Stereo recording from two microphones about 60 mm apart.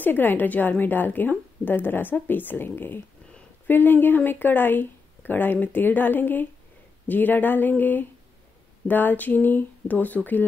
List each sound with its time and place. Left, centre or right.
0.0 s speech: left